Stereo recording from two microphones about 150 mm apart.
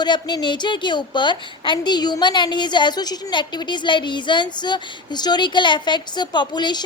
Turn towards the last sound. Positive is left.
turn(degrees=30)  # may be behind; listen again after turning